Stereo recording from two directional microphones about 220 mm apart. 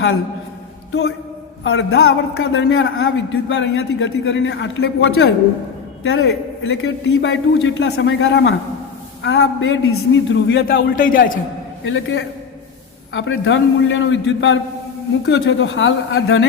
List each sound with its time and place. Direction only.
1.6 s a man's voice: 50° left (ahead or behind)
2.4 s speech: 65° left (ahead or behind); by 11.3 s 40° left (ahead or behind)
11.9 s speech: 60° left (ahead or behind)